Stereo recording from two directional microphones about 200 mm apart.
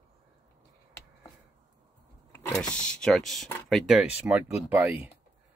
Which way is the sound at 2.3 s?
10° left (ahead or behind).